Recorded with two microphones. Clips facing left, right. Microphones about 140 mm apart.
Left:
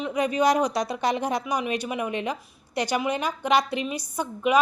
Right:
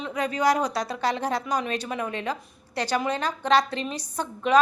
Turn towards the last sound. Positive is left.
turn(degrees=10)  # may be behind; listen again after turning